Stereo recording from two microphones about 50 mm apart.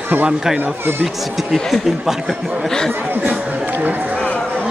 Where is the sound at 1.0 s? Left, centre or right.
Centre.